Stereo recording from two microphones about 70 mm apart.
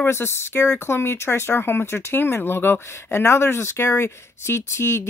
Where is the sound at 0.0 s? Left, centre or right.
Left.